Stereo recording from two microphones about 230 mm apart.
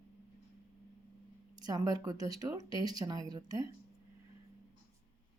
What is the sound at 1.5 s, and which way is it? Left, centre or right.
Speech, centre.